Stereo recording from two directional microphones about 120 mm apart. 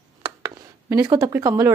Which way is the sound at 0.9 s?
30° right (ahead or behind).